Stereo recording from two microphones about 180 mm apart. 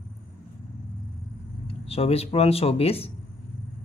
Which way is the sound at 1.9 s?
35° left (ahead or behind).